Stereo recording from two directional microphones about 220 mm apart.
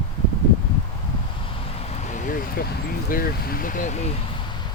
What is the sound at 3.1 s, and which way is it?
Speech, 40° left (ahead or behind).